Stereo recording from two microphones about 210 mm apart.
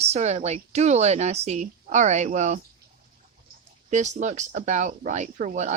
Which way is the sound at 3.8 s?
35° right (ahead or behind).